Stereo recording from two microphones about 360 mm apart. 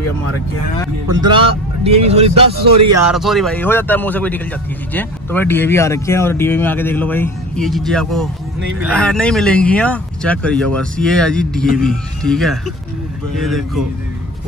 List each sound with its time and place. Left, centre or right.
1.0 s speech: centre
3.1 s speech: centre